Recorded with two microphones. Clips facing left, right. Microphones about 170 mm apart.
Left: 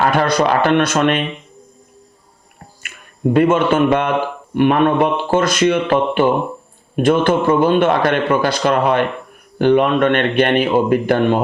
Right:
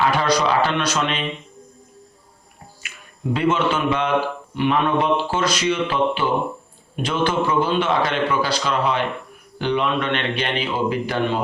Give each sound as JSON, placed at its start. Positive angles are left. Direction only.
{"t": 0.0, "sound": "a man's voice", "side_deg": 55}
{"t": 2.8, "sound": "speech", "side_deg": 55}